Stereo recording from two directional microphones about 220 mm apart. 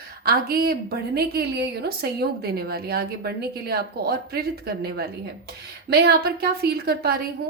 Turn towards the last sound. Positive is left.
turn(degrees=-45)  # may be behind; listen again after turning